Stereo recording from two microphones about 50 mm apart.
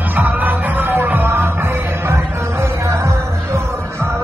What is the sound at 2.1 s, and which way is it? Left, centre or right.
Music, right.